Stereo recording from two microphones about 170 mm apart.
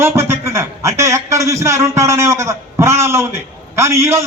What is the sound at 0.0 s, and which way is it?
A man's voice, 15° right (ahead or behind).